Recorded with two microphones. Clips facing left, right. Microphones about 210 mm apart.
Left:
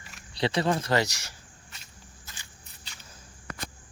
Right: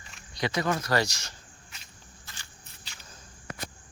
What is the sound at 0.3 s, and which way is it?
Speech, 30° left (ahead or behind).